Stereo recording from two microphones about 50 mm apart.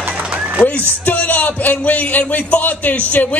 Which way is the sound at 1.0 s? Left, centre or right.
Left.